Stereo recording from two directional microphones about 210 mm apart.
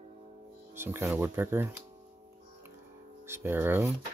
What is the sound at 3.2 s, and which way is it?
Speech, 10° right (ahead or behind).